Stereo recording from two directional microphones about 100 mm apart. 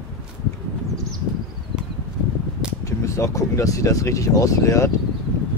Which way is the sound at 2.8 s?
30° left (ahead or behind).